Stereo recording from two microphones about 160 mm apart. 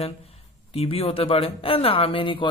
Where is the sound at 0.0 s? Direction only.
35° left (ahead or behind).